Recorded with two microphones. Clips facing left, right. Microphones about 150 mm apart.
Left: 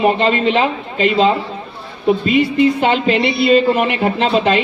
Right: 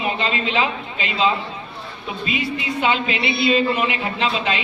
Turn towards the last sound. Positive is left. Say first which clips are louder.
# left 8 dB
turn(degrees=50)  # may be behind; listen again after turning